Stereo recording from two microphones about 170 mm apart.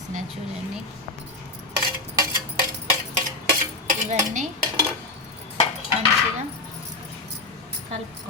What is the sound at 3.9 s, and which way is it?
Speech, 50° right (ahead or behind).